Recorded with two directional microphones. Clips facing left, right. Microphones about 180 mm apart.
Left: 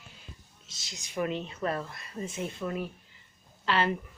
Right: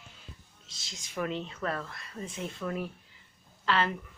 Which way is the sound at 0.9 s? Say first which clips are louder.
Left 2 dB; 10° left (ahead or behind).